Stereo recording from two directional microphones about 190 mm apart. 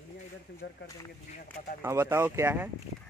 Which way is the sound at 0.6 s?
60° left (ahead or behind).